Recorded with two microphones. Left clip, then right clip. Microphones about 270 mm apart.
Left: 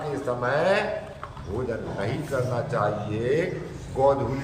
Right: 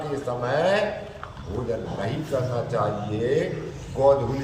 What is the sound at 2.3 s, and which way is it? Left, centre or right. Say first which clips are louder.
Speech: right 1 dB; centre.